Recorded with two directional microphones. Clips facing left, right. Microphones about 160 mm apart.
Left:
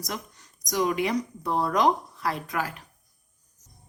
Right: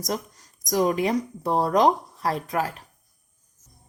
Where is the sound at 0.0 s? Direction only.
40° right (ahead or behind).